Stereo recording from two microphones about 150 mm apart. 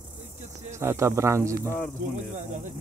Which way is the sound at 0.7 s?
20° right (ahead or behind).